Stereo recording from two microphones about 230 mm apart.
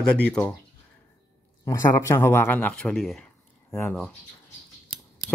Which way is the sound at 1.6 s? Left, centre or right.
Centre.